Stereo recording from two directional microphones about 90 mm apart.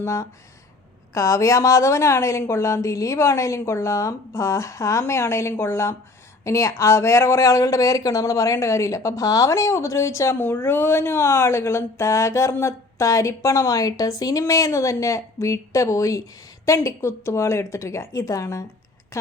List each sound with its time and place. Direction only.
0.0 s speech: 35° left (ahead or behind)